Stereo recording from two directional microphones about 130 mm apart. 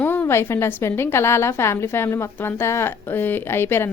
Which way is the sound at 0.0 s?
15° left (ahead or behind).